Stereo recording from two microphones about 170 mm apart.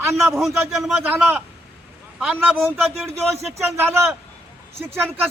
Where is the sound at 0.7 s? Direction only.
Centre (ahead or behind).